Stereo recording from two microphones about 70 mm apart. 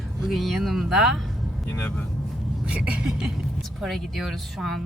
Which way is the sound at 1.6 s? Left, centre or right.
Left.